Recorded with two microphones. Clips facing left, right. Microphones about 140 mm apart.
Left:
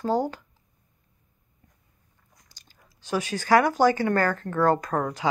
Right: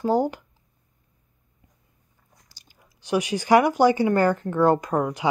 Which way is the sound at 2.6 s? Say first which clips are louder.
Right 1 dB; 10° right (ahead or behind).